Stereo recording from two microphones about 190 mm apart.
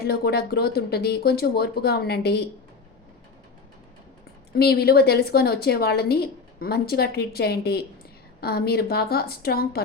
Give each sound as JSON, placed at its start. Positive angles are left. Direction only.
{"t": 0.0, "sound": "a woman's voice", "side_deg": 55}
{"t": 4.5, "sound": "a woman's voice", "side_deg": 55}